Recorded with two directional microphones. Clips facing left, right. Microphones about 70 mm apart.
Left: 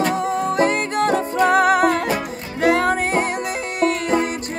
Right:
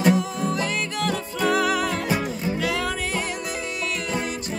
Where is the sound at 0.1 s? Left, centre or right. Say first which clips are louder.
Left 3 dB; left.